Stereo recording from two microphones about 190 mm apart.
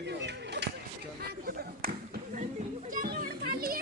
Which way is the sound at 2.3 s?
40° right (ahead or behind).